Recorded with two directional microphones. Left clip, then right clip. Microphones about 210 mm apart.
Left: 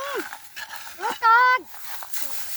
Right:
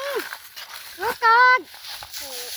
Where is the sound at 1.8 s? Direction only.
20° left (ahead or behind).